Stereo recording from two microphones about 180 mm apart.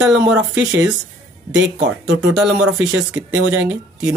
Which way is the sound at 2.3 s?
5° right (ahead or behind).